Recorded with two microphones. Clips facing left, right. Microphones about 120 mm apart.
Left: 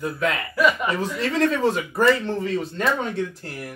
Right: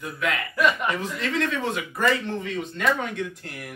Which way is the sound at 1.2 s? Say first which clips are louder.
Left 8 dB; 35° left (ahead or behind).